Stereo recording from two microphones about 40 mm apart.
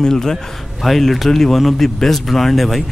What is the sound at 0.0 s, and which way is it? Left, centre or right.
Speech, centre.